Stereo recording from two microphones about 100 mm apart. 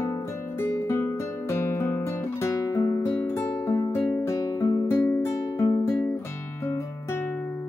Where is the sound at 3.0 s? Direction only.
25° left (ahead or behind).